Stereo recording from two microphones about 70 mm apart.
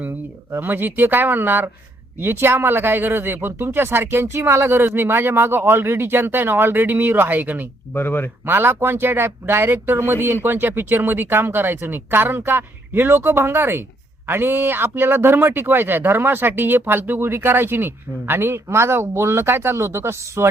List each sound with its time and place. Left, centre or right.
0.5 s speech: right
7.9 s speech: left
8.4 s speech: right